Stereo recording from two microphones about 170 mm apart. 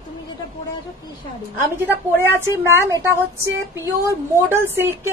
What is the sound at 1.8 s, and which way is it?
Speech, 10° right (ahead or behind).